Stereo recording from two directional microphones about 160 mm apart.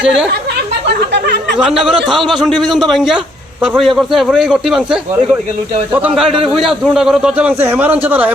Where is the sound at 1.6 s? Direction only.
Centre (ahead or behind).